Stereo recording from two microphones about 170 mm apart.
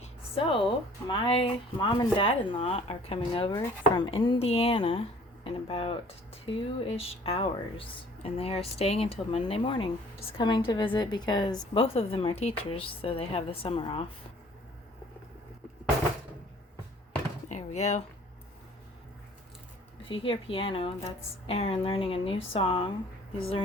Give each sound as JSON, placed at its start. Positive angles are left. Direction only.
{"t": 0.0, "sound": "speech", "side_deg": 30}
{"t": 17.5, "sound": "a sound", "side_deg": 40}
{"t": 20.1, "sound": "speech", "side_deg": 30}